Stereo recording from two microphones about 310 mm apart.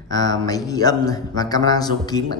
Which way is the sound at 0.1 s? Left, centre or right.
Centre.